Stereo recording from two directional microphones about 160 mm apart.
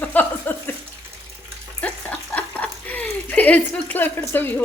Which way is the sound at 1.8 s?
10° left (ahead or behind).